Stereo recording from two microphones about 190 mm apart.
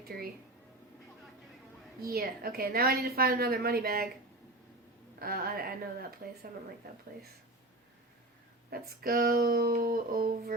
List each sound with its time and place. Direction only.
2.0 s a woman's voice: 55° right (ahead or behind)
5.2 s a woman's voice: 50° right (ahead or behind)
8.7 s a woman's voice: 50° right (ahead or behind)